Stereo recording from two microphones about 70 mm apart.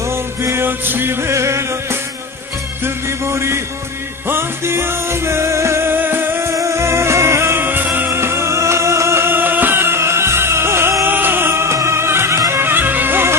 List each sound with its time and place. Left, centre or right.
0.1 s music: right
6.5 s music: right